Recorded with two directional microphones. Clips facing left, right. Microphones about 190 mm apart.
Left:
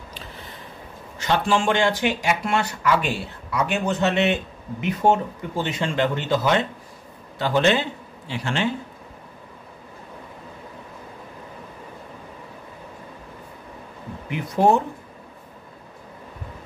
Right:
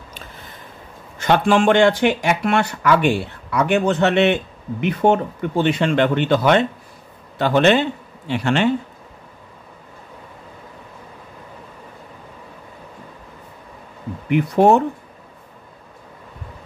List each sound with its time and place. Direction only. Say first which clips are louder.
1.1 s speech: right 5 dB; 55° right (ahead or behind)
14.3 s speech: right 5 dB; 65° right (ahead or behind)